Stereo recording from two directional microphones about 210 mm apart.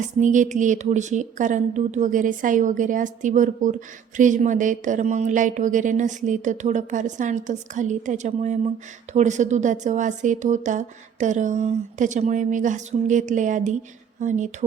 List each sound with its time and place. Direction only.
0.2 s speech: 35° right (ahead or behind)